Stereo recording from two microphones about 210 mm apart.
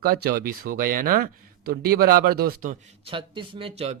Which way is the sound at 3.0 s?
25° right (ahead or behind).